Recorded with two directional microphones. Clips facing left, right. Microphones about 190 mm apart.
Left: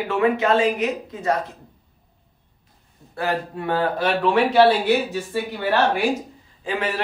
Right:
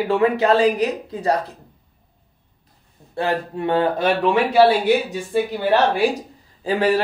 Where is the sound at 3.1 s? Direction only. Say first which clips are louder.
Right 2 dB; 25° right (ahead or behind).